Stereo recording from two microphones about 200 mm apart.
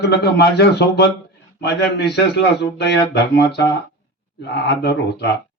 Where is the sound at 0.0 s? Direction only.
55° left (ahead or behind).